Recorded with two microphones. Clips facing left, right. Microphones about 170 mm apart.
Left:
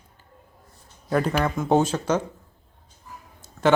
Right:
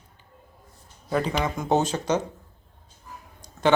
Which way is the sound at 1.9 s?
10° right (ahead or behind).